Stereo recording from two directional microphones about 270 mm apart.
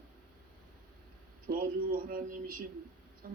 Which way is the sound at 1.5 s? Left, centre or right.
Right.